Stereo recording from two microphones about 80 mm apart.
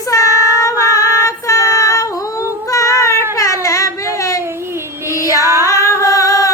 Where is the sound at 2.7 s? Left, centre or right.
Left.